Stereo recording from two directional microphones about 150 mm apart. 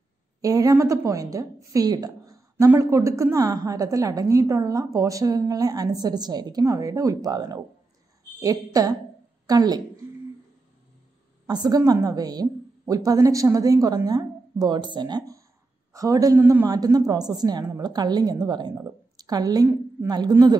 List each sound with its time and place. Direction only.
0.4 s a woman's voice: 25° right (ahead or behind)
11.4 s a woman's voice: 25° right (ahead or behind)